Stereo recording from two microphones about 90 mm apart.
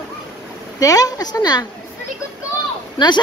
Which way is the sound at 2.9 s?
60° left (ahead or behind).